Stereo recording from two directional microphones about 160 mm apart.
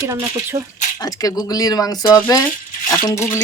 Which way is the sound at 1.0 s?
20° left (ahead or behind).